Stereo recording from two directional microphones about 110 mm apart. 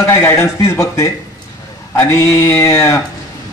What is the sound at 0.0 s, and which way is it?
A man's voice, 25° left (ahead or behind).